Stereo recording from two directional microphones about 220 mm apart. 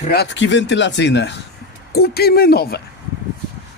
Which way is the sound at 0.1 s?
50° left (ahead or behind).